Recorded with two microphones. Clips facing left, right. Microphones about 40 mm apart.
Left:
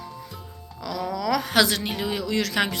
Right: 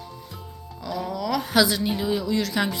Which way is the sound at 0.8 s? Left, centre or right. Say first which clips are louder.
Left 1 dB; left.